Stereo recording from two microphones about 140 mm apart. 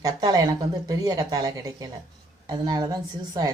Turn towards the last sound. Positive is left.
turn(degrees=-25)  # may be behind; listen again after turning